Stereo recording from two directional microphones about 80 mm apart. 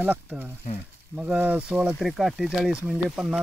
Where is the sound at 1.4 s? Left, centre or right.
Right.